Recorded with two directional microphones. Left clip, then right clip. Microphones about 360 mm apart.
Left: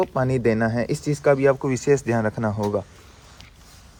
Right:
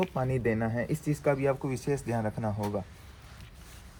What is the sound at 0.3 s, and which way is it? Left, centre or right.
Speech, left.